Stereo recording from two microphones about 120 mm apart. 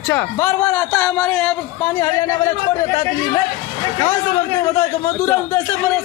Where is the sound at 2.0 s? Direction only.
25° left (ahead or behind).